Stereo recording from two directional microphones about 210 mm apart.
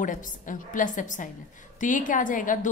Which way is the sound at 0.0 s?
40° left (ahead or behind).